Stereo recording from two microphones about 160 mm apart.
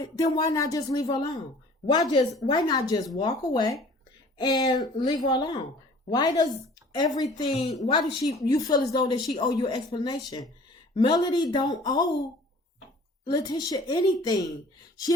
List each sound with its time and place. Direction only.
0.0 s speech: 25° left (ahead or behind)
13.3 s speech: 25° left (ahead or behind)